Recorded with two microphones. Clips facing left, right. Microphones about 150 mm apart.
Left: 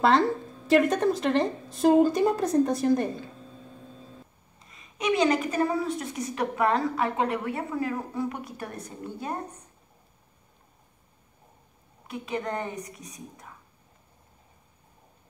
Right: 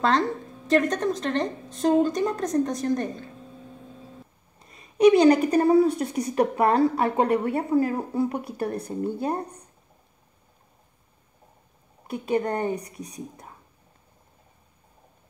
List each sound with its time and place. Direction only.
0.7 s a woman's voice: 5° left (ahead or behind)
4.6 s a woman's voice: 35° right (ahead or behind)
12.1 s a woman's voice: 35° right (ahead or behind)